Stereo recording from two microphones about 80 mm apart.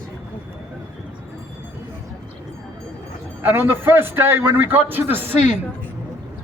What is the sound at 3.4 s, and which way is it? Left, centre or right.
A man's voice, right.